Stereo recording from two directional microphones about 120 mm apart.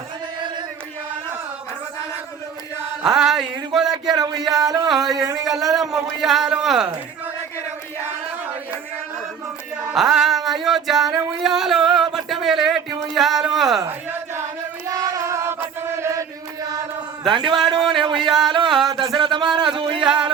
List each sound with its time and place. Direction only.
3.2 s speech: 5° right (ahead or behind)
4.2 s music: 30° right (ahead or behind)
4.9 s speech: centre (ahead or behind)
5.1 s speech: 25° right (ahead or behind)
5.7 s speech: centre (ahead or behind)
9.9 s music: 5° right (ahead or behind)
11.4 s a sound: 5° right (ahead or behind)
13.1 s speech: centre (ahead or behind)
14.8 s chant: 30° right (ahead or behind)
17.2 s a sound: 40° right (ahead or behind)
18.3 s music: centre (ahead or behind)
18.9 s a sound: 45° right (ahead or behind)